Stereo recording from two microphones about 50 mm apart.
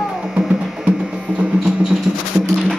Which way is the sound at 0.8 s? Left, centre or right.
Right.